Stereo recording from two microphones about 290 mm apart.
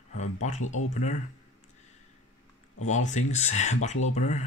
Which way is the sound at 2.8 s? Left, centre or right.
Left.